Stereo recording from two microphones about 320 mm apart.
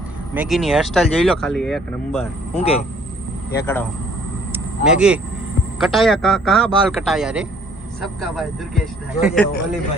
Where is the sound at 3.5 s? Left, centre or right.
Centre.